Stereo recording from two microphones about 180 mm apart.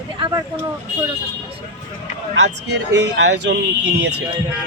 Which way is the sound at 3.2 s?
70° right (ahead or behind).